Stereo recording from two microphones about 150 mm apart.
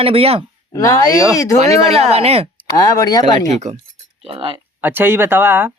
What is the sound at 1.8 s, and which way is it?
Speech, 45° right (ahead or behind).